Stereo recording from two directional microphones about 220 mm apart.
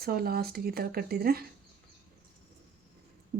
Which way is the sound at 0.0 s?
45° right (ahead or behind).